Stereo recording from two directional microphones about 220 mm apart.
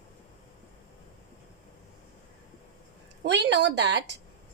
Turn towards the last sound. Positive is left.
turn(degrees=-50)  # may be behind; listen again after turning